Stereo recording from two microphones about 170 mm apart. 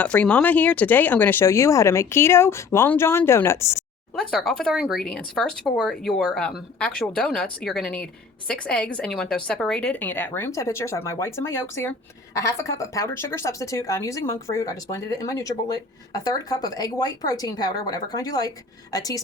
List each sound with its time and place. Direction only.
0.0 s a woman's voice: 5° left (ahead or behind)
4.2 s a woman's voice: centre (ahead or behind); by 19.2 s 20° left (ahead or behind)